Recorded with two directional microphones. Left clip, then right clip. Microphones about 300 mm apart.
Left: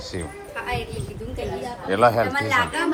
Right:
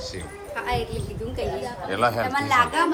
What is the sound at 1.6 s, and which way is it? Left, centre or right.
Chatter, centre.